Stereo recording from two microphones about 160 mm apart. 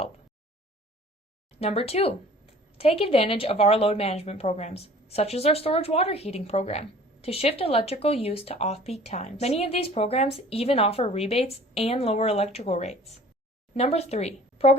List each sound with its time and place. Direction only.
1.5 s a woman's voice: 40° left (ahead or behind)